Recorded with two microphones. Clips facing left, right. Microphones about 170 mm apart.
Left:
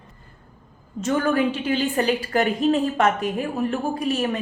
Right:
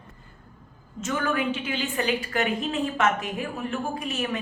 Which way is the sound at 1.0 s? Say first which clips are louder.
Left 6 dB; 35° left (ahead or behind).